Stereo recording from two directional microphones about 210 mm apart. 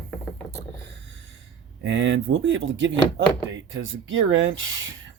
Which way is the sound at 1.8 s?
60° right (ahead or behind).